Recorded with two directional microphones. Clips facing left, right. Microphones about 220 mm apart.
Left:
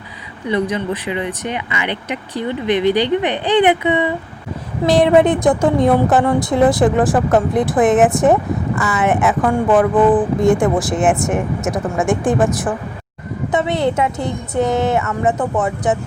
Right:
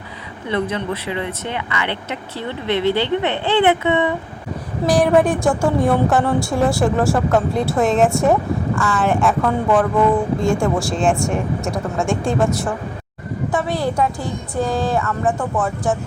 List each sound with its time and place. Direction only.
0.4 s a woman's voice: 15° left (ahead or behind)